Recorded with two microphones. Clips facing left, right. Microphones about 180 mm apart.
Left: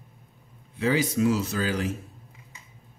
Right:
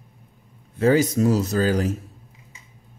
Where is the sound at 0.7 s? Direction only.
45° right (ahead or behind).